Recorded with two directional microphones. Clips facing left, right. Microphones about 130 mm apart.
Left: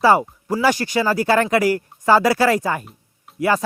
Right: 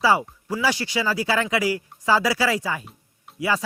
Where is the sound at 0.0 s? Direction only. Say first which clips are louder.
Left 5 dB; 50° left (ahead or behind).